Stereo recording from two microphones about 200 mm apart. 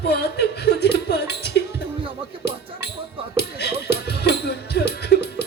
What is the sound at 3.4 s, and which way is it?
Music, 55° left (ahead or behind).